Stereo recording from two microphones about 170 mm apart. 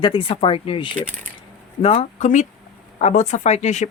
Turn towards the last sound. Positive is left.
turn(degrees=45)  # may be behind; listen again after turning